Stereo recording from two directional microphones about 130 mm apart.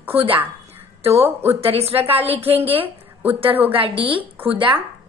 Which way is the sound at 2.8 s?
15° right (ahead or behind).